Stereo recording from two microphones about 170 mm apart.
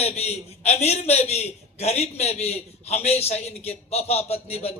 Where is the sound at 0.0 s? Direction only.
40° left (ahead or behind).